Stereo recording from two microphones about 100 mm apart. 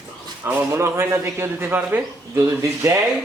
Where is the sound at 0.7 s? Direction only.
25° right (ahead or behind).